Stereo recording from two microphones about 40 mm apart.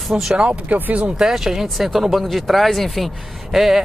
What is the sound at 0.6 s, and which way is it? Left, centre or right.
Speech, right.